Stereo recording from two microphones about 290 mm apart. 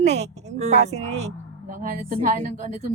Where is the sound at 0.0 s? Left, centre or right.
Right.